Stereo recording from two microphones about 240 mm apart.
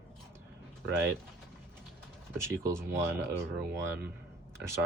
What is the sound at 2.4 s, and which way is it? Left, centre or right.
Speech, centre.